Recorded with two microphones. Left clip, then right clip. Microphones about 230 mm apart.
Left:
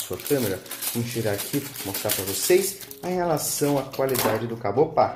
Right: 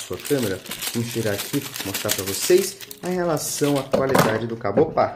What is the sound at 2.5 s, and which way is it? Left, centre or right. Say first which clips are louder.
Speech: right 2 dB; centre.